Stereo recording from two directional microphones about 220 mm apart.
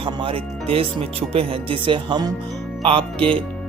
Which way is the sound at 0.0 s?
25° right (ahead or behind).